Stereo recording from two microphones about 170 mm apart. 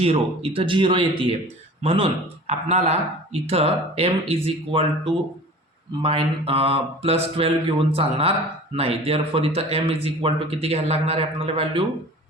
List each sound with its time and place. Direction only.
0.0 s speech: 35° right (ahead or behind)
6.0 s speech: 35° right (ahead or behind)